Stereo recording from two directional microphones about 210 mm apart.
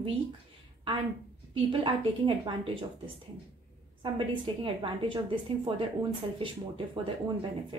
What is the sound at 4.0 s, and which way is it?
A woman's voice, 25° right (ahead or behind).